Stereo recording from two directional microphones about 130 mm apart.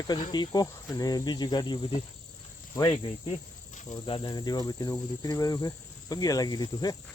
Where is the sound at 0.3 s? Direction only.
30° left (ahead or behind).